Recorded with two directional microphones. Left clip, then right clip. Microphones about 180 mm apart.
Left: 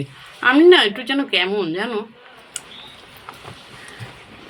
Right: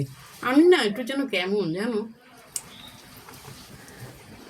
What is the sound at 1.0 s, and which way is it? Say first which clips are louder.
Speech: left 7 dB; 5° right (ahead or behind).